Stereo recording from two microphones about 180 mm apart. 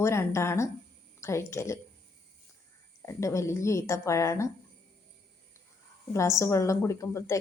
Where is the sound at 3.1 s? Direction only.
15° left (ahead or behind).